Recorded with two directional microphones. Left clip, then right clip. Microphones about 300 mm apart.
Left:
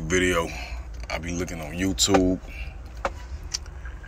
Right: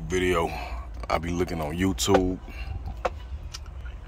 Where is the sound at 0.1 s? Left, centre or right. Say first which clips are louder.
Left 2 dB; centre.